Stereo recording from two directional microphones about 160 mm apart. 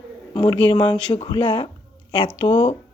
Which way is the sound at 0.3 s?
30° left (ahead or behind).